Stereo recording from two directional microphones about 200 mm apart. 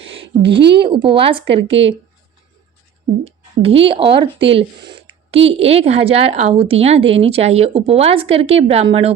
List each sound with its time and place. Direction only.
0.4 s a woman's voice: 60° right (ahead or behind)
0.8 s speech: 25° right (ahead or behind)
3.2 s speech: 30° right (ahead or behind)